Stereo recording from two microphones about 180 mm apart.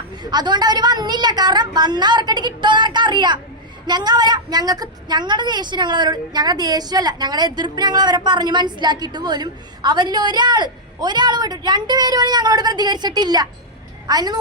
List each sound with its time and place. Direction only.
0.2 s a woman's voice: 25° right (ahead or behind)